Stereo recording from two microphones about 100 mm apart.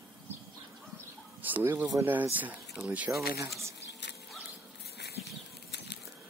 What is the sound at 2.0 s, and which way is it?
Speech, 20° right (ahead or behind).